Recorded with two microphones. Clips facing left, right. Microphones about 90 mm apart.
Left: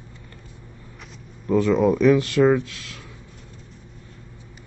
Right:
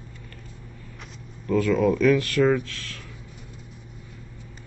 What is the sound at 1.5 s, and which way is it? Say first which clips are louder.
Speech: left 3 dB; 20° left (ahead or behind).